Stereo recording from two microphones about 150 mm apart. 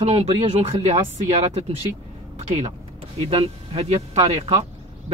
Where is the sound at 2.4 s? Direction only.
50° right (ahead or behind).